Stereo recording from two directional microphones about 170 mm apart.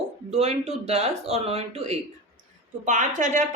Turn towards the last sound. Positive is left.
turn(degrees=-50)  # may be behind; listen again after turning